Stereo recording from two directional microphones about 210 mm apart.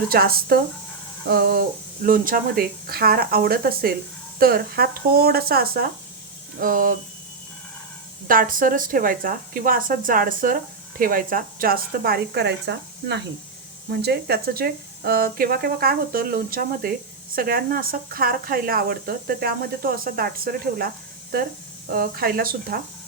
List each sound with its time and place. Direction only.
0.1 s speech: 45° right (ahead or behind)
8.3 s speech: 40° right (ahead or behind)